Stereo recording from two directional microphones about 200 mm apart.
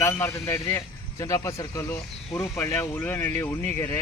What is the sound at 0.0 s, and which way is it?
Speech, 10° left (ahead or behind).